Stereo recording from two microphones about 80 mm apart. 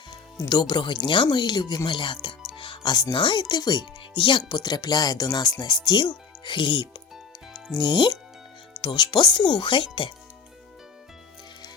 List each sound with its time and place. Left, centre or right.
0.3 s speech: left
1.9 s speech: left
3.5 s speech: left
4.5 s speech: left
7.8 s speech: left
8.8 s speech: left
9.6 s speech: left